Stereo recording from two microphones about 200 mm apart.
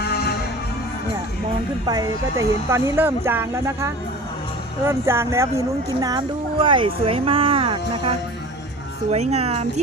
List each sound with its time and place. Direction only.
0.0 s music: 55° left (ahead or behind)
1.9 s speech: 15° right (ahead or behind)